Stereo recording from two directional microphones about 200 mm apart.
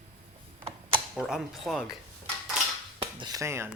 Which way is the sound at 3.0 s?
20° right (ahead or behind).